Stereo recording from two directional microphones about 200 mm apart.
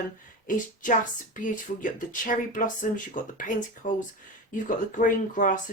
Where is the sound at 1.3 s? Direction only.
40° left (ahead or behind).